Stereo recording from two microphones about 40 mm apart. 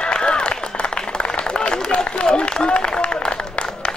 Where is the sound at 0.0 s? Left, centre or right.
Left.